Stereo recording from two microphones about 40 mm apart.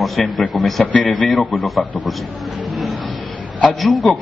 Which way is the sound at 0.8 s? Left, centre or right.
Left.